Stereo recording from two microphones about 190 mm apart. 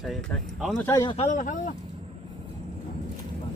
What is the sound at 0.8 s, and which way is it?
Speech, 20° left (ahead or behind).